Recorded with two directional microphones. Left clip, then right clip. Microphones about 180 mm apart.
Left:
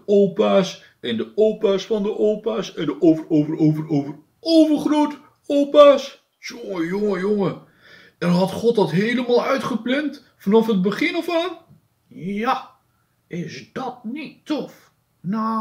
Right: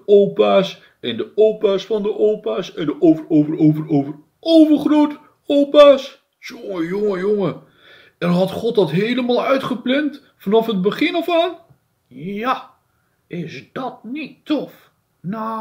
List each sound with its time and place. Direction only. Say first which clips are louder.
0.3 s speech: right 3 dB; 30° right (ahead or behind)